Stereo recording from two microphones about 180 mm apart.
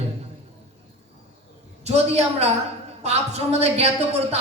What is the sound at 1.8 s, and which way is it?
A woman's voice, 35° right (ahead or behind).